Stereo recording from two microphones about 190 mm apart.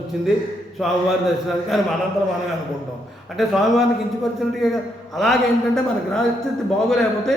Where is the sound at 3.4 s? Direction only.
Centre (ahead or behind).